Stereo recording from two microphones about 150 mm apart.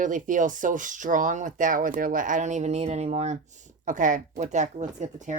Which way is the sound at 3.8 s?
60° right (ahead or behind).